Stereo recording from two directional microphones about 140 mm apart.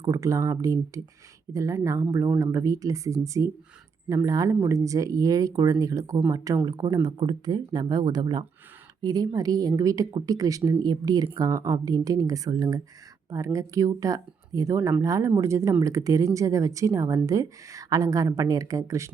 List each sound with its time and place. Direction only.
0.0 s a woman's voice: 25° right (ahead or behind)